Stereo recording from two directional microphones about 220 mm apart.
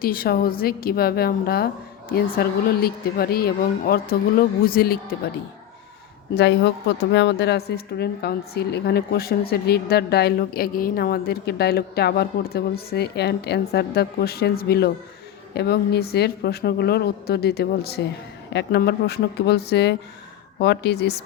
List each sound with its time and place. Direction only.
0.0 s a woman's voice: 40° left (ahead or behind)
6.3 s a woman's voice: 55° left (ahead or behind)